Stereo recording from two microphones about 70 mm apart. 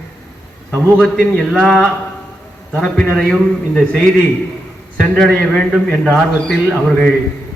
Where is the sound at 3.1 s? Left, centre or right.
Centre.